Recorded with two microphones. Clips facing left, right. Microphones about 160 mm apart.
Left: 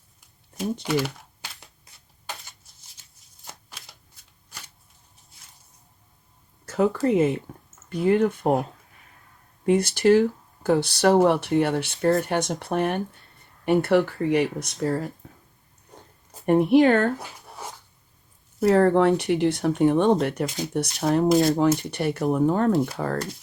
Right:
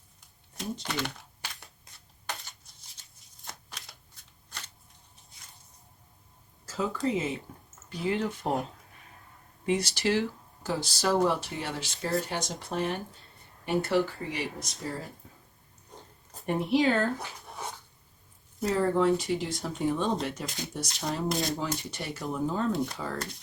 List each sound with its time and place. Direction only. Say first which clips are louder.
0.5 s speech: left 10 dB; 5° left (ahead or behind)
1.8 s shuffling cards: even; 10° left (ahead or behind)
6.7 s speech: left 8 dB; 65° left (ahead or behind)
9.6 s speech: left 9 dB; 55° left (ahead or behind)
15.2 s a sound: left 6 dB; 65° left (ahead or behind)
16.5 s speech: left 9 dB; 55° left (ahead or behind)
18.6 s speech: left 8 dB; 65° left (ahead or behind)